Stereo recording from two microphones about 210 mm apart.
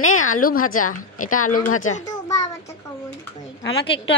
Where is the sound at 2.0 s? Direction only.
15° left (ahead or behind).